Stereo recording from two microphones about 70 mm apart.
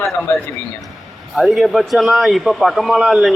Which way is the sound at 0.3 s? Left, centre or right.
Left.